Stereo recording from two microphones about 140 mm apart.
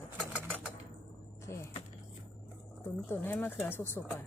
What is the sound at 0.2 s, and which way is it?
Sewing machine, 10° right (ahead or behind).